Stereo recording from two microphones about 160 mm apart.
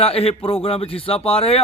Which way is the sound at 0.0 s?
40° left (ahead or behind).